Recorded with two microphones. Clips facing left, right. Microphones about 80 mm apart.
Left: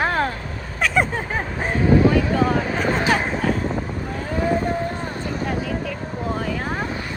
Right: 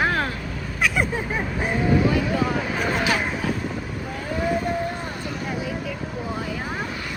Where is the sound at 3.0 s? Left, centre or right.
Left.